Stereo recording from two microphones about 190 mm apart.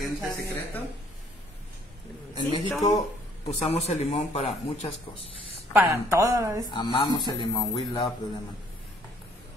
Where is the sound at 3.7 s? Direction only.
35° left (ahead or behind).